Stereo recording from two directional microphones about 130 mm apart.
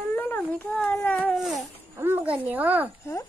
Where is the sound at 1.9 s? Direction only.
15° right (ahead or behind).